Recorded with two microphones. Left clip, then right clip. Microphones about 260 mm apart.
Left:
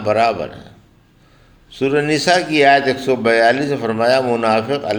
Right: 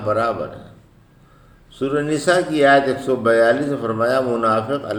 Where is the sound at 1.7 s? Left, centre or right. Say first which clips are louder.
Left 4 dB; left.